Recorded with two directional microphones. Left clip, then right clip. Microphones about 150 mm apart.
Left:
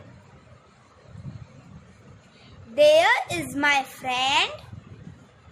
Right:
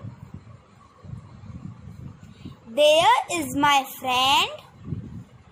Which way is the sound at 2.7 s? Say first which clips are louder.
Even; 20° right (ahead or behind).